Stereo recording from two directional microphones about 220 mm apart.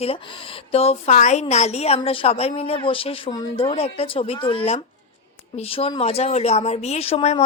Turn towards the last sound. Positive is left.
turn(degrees=25)  # may be behind; listen again after turning